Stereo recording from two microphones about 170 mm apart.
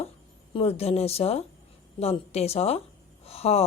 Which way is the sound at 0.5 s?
35° left (ahead or behind).